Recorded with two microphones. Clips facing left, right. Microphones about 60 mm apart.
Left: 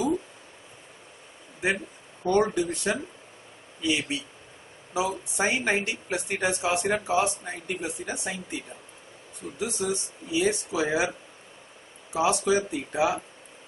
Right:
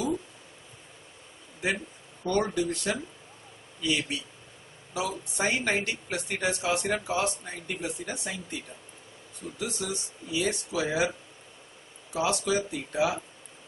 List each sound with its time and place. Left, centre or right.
2.2 s speech: centre
12.1 s speech: left